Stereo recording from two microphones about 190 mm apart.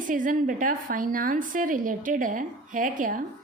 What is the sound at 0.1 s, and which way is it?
A woman's voice, 45° right (ahead or behind).